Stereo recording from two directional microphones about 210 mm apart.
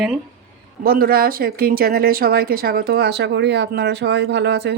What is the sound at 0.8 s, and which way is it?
Speech, 45° right (ahead or behind).